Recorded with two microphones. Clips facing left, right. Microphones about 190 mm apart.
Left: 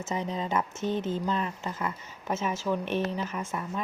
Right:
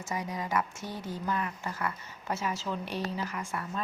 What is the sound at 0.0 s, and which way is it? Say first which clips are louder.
A woman's voice: left 4 dB; 25° left (ahead or behind).